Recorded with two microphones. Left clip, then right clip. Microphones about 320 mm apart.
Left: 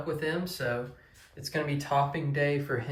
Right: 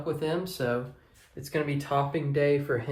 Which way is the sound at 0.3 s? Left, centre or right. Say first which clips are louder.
Right 2 dB; centre.